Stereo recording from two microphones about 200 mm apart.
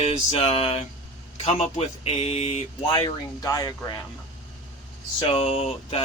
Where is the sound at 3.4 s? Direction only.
15° left (ahead or behind).